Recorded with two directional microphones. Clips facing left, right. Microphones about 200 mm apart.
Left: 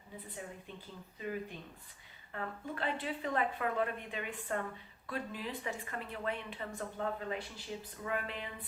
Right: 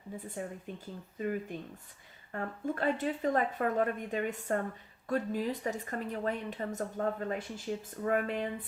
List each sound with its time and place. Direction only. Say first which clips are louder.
0.4 s a woman's voice: right 7 dB; 45° right (ahead or behind)